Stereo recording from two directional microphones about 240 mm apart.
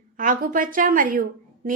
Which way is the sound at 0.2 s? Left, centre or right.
Right.